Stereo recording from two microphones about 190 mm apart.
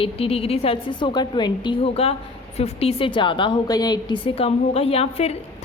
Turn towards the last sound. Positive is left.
turn(degrees=30)  # may be behind; listen again after turning